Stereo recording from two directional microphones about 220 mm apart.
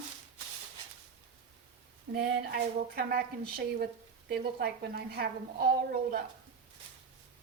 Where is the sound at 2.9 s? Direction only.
45° right (ahead or behind).